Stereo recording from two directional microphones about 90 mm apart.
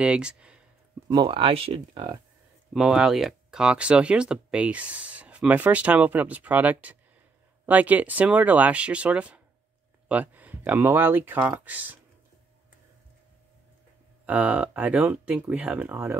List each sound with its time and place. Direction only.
0.0 s speech: 10° right (ahead or behind)
1.2 s speech: 85° right
2.7 s speech: 5° right (ahead or behind)
14.2 s speech: 20° right (ahead or behind)